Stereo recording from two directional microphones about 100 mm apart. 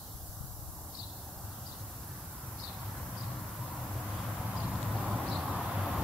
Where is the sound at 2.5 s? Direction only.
5° left (ahead or behind).